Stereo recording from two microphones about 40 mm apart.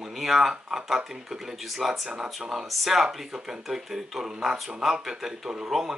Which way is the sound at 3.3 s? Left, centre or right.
Centre.